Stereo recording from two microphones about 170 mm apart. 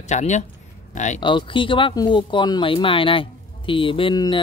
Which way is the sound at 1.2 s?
30° left (ahead or behind).